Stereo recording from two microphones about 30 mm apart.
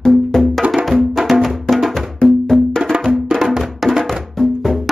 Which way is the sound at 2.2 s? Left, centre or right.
Centre.